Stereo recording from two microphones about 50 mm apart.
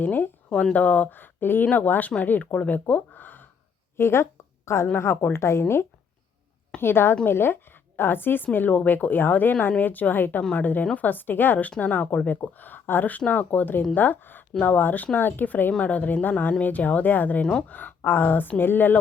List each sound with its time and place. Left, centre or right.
0.0 s speech: left
0.5 s a woman's voice: left
1.6 s a woman's voice: left
3.9 s a sound: left
4.9 s speech: left
5.4 s a woman's voice: left
11.8 s a woman's voice: left
15.8 s a woman's voice: left